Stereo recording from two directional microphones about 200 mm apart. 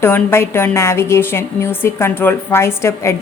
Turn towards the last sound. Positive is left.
turn(degrees=15)  # may be behind; listen again after turning